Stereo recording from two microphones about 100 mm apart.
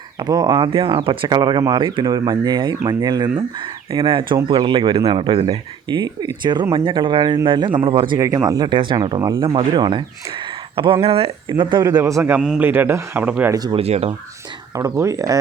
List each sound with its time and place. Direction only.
0.2 s speech: 45° right (ahead or behind)
0.7 s speech: 60° right (ahead or behind); by 3.4 s 40° right (ahead or behind)
3.9 s speech: 55° right (ahead or behind); by 5.5 s 75° right (ahead or behind)
5.9 s speech: 45° right (ahead or behind)
8.4 s speech: 45° right (ahead or behind)
11.0 s speech: 70° right (ahead or behind); by 11.8 s 55° right (ahead or behind)
11.8 s speech: 40° right (ahead or behind)
12.5 s speech: 20° right (ahead or behind)
13.7 s speech: 80° right
14.8 s speech: 30° right (ahead or behind)